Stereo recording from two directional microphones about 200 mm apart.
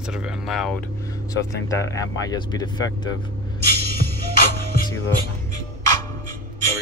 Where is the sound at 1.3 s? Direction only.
15° left (ahead or behind).